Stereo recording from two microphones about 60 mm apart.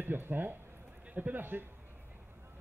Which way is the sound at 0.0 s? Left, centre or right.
Right.